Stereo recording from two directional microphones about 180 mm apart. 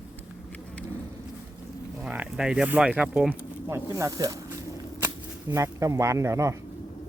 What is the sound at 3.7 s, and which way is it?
Speech, 15° right (ahead or behind).